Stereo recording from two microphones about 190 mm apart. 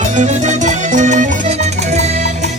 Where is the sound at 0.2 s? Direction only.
40° right (ahead or behind).